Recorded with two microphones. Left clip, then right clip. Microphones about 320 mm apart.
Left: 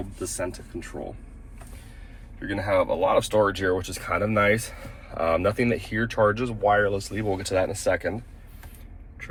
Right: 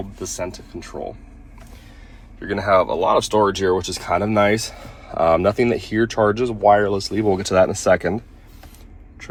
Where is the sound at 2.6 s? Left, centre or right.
Centre.